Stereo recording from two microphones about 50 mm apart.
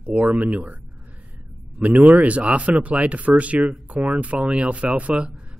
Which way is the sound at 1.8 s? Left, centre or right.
Right.